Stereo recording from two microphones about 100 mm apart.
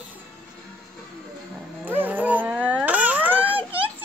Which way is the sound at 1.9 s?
20° right (ahead or behind).